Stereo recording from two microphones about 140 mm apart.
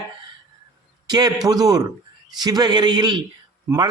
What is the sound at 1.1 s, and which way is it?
A man's voice, 30° right (ahead or behind).